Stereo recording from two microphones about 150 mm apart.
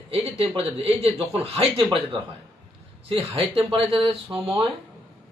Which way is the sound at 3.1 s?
40° right (ahead or behind).